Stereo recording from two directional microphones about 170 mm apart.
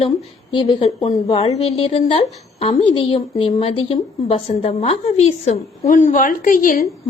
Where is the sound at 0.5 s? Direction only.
30° left (ahead or behind).